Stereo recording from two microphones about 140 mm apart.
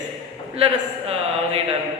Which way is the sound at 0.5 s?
45° right (ahead or behind).